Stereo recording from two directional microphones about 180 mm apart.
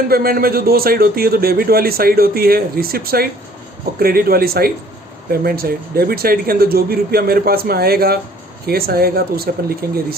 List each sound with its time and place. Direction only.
0.1 s speech: 55° right (ahead or behind)